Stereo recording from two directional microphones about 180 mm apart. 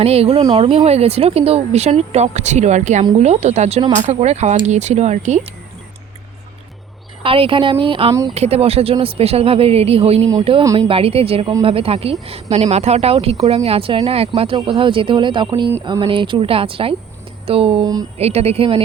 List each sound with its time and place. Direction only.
0.0 s speech: 35° right (ahead or behind)
7.2 s speech: 30° right (ahead or behind)